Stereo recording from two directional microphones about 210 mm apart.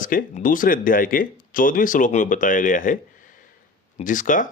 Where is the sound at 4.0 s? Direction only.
40° left (ahead or behind).